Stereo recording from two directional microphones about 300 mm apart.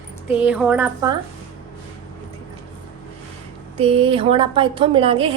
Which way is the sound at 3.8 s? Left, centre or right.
Centre.